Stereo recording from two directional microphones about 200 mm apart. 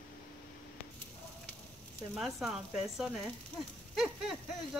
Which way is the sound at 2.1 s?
Centre (ahead or behind).